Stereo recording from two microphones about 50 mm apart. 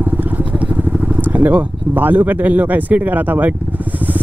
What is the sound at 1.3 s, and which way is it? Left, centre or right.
Speech, right.